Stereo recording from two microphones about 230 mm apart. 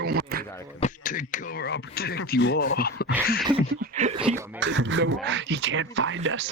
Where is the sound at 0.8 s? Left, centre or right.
Left.